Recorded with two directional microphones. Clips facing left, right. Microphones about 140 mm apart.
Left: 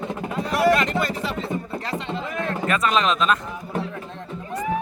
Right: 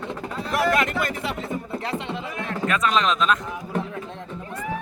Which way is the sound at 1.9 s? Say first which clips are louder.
Left 2 dB; 15° right (ahead or behind).